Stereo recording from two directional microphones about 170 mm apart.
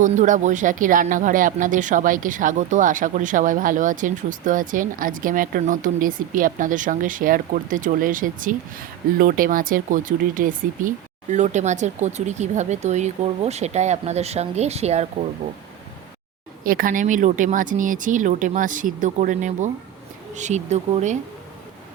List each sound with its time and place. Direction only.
0.0 s speech: 45° right (ahead or behind)
16.6 s speech: 55° right (ahead or behind)